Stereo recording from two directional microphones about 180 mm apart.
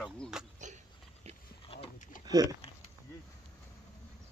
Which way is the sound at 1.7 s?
35° left (ahead or behind).